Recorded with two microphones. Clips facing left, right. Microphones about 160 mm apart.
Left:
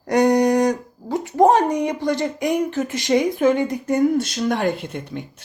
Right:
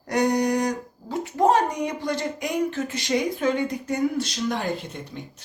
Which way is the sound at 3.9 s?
50° left (ahead or behind).